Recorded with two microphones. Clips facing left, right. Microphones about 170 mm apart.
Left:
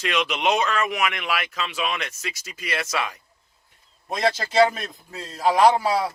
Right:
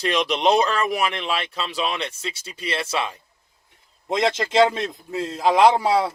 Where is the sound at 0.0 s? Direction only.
35° right (ahead or behind).